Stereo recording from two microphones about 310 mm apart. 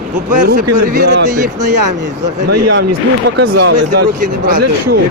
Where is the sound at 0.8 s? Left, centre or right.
Right.